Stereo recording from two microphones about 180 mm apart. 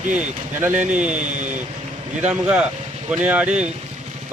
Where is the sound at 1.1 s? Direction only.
45° right (ahead or behind).